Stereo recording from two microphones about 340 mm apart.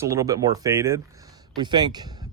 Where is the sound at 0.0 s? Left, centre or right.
Centre.